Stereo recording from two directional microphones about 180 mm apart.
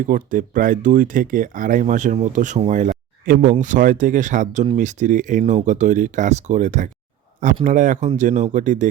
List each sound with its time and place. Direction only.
0.1 s speech: 45° right (ahead or behind)